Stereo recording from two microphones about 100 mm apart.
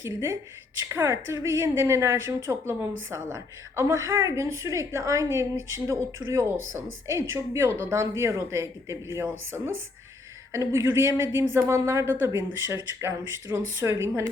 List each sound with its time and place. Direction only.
0.0 s a woman's voice: 25° right (ahead or behind)